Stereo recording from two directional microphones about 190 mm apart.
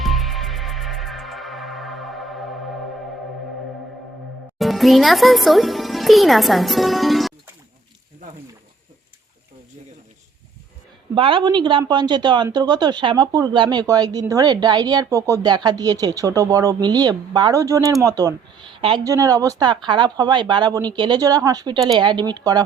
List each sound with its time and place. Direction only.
0.0 s music: centre (ahead or behind)
4.5 s a child's voice: centre (ahead or behind)
11.1 s a woman's voice: 25° right (ahead or behind)